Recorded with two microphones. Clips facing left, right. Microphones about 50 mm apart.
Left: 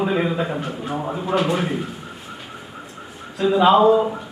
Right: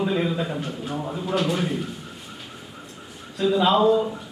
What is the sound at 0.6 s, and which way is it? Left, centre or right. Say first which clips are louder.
Speech: left 3 dB; centre.